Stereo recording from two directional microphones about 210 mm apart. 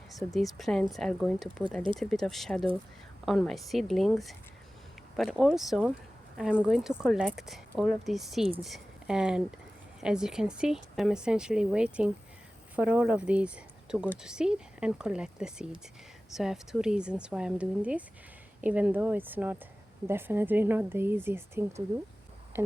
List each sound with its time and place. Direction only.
0.3 s speech: centre (ahead or behind)